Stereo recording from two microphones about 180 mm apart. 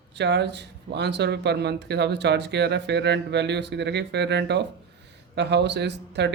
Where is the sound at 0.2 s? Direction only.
70° right (ahead or behind).